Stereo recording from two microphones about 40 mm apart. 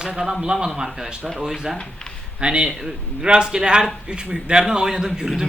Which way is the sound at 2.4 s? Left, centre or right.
Right.